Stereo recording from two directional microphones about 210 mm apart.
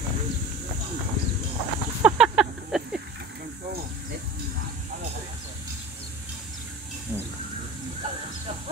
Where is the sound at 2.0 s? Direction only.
5° right (ahead or behind).